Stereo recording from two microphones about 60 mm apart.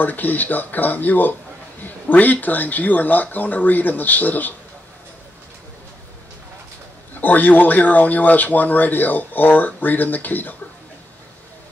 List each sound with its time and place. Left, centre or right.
0.0 s speech: left
7.2 s speech: left